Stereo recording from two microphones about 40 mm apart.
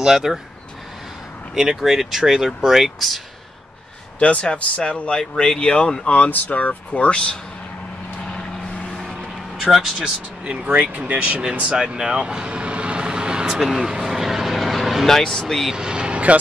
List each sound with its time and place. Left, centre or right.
0.0 s speech: centre
1.5 s speech: centre
4.2 s speech: left
6.0 s speech: left
8.2 s vehicle: left
9.6 s speech: centre
10.4 s speech: right
11.8 s speech: centre
14.0 s vehicle: centre
15.0 s speech: centre
15.7 s vehicle: right